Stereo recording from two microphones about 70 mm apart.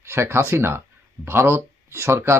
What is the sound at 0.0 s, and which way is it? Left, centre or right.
Speech, right.